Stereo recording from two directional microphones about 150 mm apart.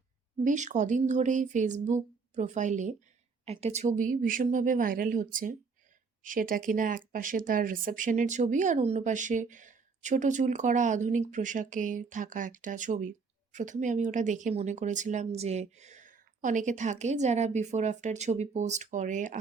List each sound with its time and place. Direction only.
0.4 s speech: 55° right (ahead or behind)
3.4 s speech: 45° right (ahead or behind)